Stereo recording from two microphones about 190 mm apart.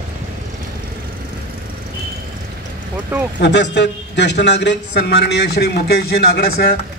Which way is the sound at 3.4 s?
65° left (ahead or behind).